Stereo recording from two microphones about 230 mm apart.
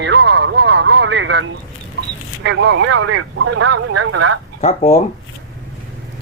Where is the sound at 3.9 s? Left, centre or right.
Right.